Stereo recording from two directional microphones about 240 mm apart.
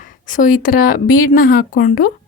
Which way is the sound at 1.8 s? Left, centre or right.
Left.